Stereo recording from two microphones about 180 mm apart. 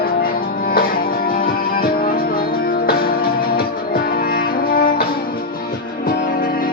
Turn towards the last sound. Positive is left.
turn(degrees=55)  # may be behind; listen again after turning